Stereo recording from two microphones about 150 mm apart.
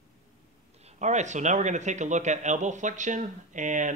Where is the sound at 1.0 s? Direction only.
50° right (ahead or behind).